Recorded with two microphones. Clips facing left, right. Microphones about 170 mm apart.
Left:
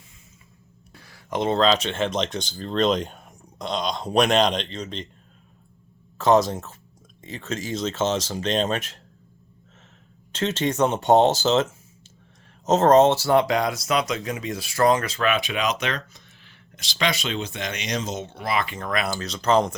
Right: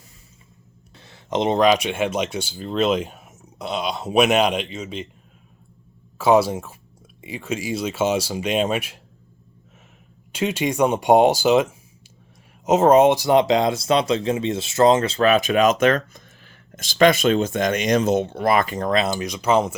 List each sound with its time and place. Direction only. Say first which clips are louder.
0.9 s speech: right 4 dB; 25° right (ahead or behind); by 5.0 s 5° right (ahead or behind)
6.1 s speech: right 2 dB; 10° right (ahead or behind)
10.3 s speech: right 2 dB; 10° right (ahead or behind)